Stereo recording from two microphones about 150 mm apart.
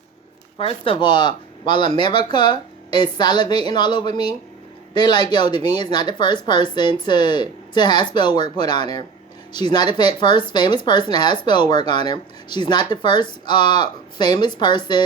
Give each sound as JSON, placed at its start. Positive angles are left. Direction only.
{"t": 0.6, "sound": "a woman's voice", "side_deg": 35}